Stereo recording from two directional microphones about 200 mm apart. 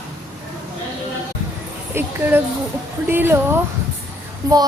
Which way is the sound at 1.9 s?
10° right (ahead or behind).